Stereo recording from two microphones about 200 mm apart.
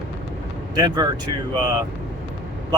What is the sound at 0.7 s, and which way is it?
Speech, 20° right (ahead or behind).